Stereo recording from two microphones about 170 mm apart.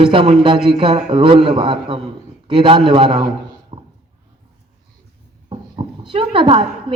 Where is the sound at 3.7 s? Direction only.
30° right (ahead or behind).